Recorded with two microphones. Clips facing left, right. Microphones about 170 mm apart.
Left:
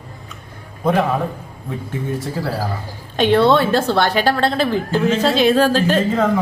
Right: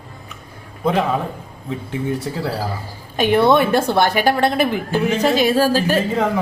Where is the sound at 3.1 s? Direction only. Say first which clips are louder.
Left 1 dB; 10° right (ahead or behind).